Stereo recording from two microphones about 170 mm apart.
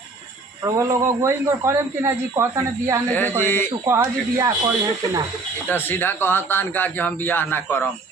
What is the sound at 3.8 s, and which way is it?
Speech, 20° right (ahead or behind).